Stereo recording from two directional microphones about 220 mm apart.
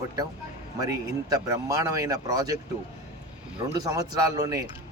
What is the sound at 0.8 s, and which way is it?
A man's voice, 15° right (ahead or behind).